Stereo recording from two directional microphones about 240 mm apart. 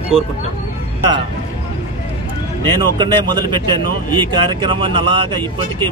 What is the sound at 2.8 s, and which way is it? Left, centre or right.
Speech, centre.